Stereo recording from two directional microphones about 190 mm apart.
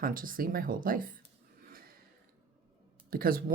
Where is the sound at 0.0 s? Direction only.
45° right (ahead or behind).